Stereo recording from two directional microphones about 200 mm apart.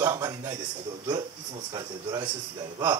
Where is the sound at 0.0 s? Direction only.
15° right (ahead or behind).